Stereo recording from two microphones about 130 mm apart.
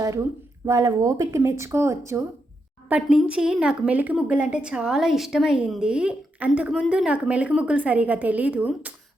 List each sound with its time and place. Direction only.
0.0 s speech: 25° right (ahead or behind)
2.9 s a woman's voice: 10° right (ahead or behind)